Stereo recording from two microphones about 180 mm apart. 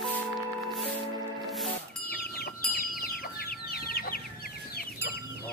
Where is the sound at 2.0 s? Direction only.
55° left (ahead or behind).